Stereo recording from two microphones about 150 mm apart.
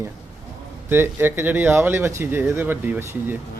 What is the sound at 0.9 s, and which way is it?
Speech, 15° right (ahead or behind).